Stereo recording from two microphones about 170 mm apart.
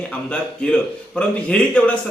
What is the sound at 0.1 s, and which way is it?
Speech, 5° left (ahead or behind).